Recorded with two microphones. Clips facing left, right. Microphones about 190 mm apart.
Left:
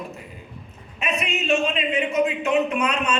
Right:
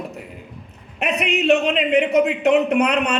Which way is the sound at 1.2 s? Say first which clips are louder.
Right 6 dB; 65° right (ahead or behind).